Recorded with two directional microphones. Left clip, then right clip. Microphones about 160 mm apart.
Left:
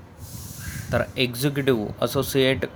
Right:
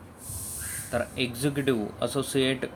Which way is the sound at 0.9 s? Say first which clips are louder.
Left 5 dB; 35° left (ahead or behind).